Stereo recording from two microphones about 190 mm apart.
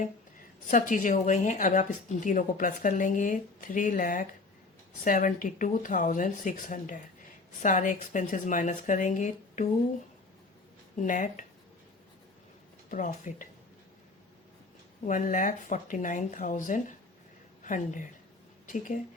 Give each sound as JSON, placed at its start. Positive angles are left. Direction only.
{"t": 0.7, "sound": "speech", "side_deg": 45}
{"t": 10.9, "sound": "speech", "side_deg": 45}
{"t": 12.9, "sound": "speech", "side_deg": 40}
{"t": 15.0, "sound": "a woman's voice", "side_deg": 45}